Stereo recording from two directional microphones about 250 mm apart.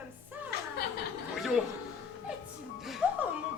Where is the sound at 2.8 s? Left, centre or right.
Centre.